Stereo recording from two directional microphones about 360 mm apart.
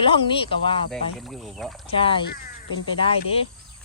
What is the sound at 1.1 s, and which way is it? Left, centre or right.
Speech, centre.